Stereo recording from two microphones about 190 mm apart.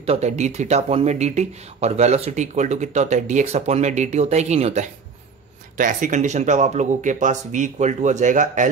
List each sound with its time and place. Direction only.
0.0 s speech: 35° right (ahead or behind)